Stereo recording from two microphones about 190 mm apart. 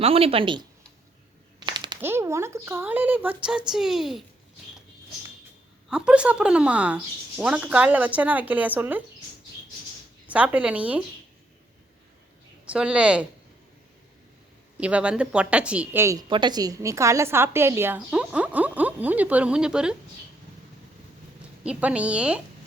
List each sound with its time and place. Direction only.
0.0 s speech: 30° right (ahead or behind)
1.5 s a sound: 25° right (ahead or behind)
2.0 s a woman's voice: 10° right (ahead or behind)
5.9 s a woman's voice: 5° right (ahead or behind)
10.2 s a woman's voice: 5° right (ahead or behind)
12.6 s speech: 5° right (ahead or behind)
14.8 s a woman's voice: 5° right (ahead or behind)
21.6 s a woman's voice: 5° right (ahead or behind)